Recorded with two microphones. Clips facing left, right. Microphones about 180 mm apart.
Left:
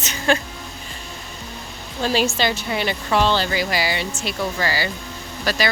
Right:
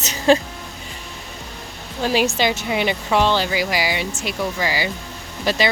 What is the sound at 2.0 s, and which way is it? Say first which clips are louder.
A woman's voice: right 1 dB; 15° right (ahead or behind).